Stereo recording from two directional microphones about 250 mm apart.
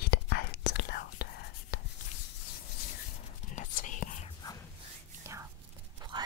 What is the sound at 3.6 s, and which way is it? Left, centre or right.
Whispering, left.